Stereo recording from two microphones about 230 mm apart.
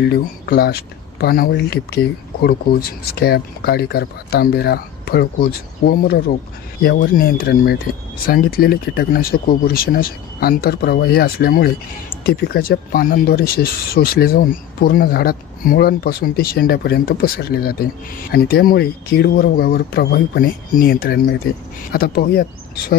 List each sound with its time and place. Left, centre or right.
0.0 s speech: left